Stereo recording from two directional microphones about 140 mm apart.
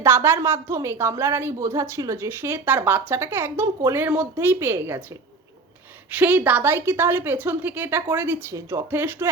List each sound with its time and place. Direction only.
0.0 s a woman's voice: 15° right (ahead or behind)
6.1 s a woman's voice: 10° right (ahead or behind)